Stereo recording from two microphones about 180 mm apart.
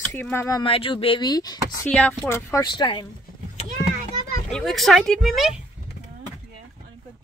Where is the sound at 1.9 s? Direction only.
10° left (ahead or behind); by 3.0 s 25° left (ahead or behind).